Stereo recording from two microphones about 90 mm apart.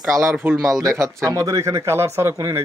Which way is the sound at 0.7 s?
35° right (ahead or behind).